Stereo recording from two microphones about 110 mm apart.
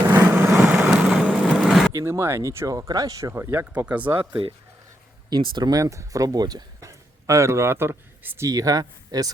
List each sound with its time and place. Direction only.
0.1 s vehicle: 20° right (ahead or behind)
0.6 s vehicle: 5° right (ahead or behind)
1.9 s speech: 25° right (ahead or behind)
4.2 s speech: 50° right (ahead or behind)
5.8 s speech: 30° right (ahead or behind)
8.4 s speech: 35° right (ahead or behind)